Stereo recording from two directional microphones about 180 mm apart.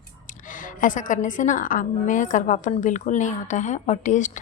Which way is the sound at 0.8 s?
45° left (ahead or behind).